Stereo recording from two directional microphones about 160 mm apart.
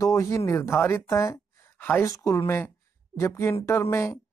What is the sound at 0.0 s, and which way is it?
Speech, 20° left (ahead or behind).